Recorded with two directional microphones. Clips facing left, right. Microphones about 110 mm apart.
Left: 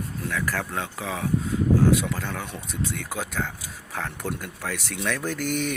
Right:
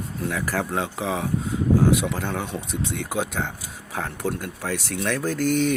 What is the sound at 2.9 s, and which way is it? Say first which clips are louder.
Speech: right 5 dB; 25° right (ahead or behind).